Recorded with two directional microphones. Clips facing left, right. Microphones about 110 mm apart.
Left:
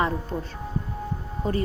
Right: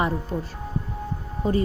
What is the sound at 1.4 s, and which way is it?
Speech, 15° right (ahead or behind).